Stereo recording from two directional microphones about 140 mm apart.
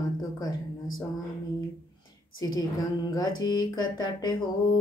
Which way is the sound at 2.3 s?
30° left (ahead or behind).